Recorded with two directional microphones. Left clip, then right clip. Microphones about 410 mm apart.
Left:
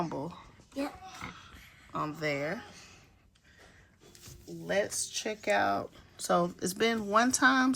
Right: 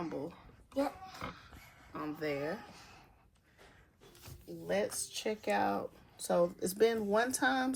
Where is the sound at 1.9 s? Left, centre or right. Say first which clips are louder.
Left 5 dB; centre.